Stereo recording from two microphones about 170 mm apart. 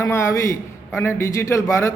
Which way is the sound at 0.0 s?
15° left (ahead or behind).